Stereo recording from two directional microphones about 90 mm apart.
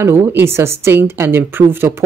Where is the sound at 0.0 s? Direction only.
25° right (ahead or behind).